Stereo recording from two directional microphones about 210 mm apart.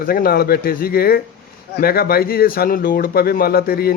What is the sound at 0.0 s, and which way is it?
Speech, 45° left (ahead or behind).